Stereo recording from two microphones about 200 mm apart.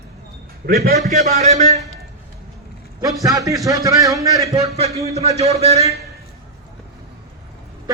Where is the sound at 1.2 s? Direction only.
35° right (ahead or behind).